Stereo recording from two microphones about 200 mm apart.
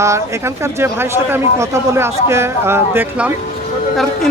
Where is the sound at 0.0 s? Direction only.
15° right (ahead or behind).